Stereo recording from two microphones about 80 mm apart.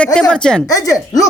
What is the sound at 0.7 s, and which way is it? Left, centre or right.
Speech, left.